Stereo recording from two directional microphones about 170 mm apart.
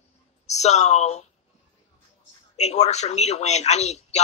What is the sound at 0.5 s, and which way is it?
Speech, 40° left (ahead or behind).